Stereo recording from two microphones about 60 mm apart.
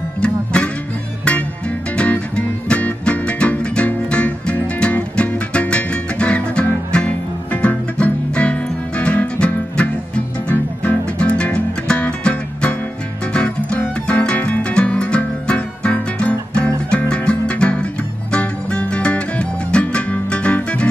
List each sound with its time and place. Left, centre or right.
0.2 s music: centre
2.0 s music: left
11.1 s music: centre